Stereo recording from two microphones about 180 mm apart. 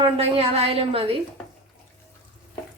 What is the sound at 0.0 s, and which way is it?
A woman's voice, 35° right (ahead or behind).